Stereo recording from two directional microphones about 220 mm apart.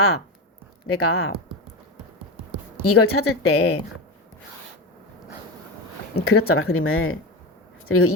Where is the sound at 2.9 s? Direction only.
80° left.